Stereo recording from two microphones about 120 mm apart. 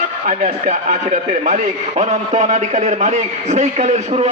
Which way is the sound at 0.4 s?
90° right.